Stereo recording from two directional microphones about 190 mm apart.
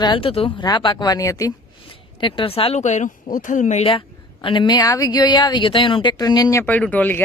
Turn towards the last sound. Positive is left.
turn(degrees=10)  # may be behind; listen again after turning